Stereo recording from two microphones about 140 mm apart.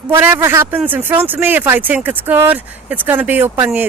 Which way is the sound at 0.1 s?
15° right (ahead or behind).